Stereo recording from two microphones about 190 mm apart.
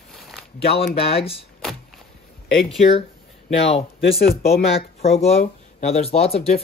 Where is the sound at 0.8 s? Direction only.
30° left (ahead or behind).